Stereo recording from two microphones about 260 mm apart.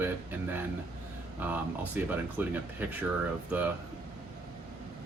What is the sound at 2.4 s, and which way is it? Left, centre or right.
Speech, centre.